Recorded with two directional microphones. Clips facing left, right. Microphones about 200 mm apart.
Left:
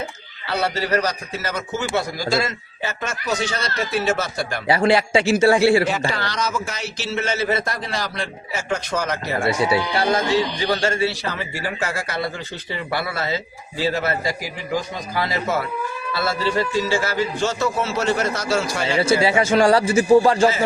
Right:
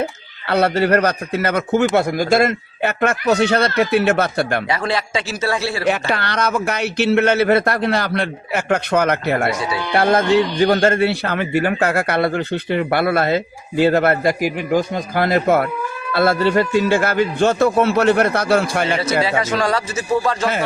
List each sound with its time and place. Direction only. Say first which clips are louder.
0.0 s speech: right 7 dB; 60° right (ahead or behind)
4.7 s a man's voice: left 4 dB; 30° left (ahead or behind)
5.8 s speech: right 3 dB; 60° right (ahead or behind)
9.5 s speech: left 2 dB; 30° left (ahead or behind)
9.9 s speech: right 5 dB; 55° right (ahead or behind)
19.2 s a man's voice: left 3 dB; 30° left (ahead or behind)